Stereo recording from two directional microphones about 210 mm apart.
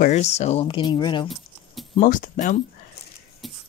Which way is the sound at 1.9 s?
40° left (ahead or behind).